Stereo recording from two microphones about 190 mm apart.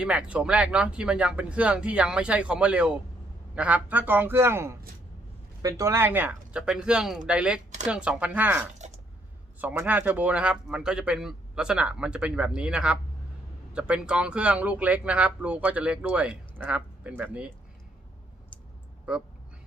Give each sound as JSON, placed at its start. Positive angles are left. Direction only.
{"t": 0.0, "sound": "speech", "side_deg": -5}
{"t": 8.8, "sound": "a sound", "side_deg": -35}
{"t": 9.6, "sound": "speech", "side_deg": -10}